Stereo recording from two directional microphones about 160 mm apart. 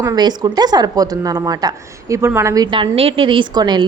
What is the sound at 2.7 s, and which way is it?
A woman's voice, 35° right (ahead or behind).